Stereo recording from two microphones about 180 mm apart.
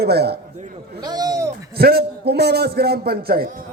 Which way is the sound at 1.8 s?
60° right (ahead or behind).